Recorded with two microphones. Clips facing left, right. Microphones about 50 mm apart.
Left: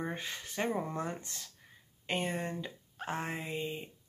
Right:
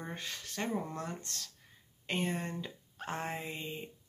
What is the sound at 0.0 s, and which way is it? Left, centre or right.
Speech, centre.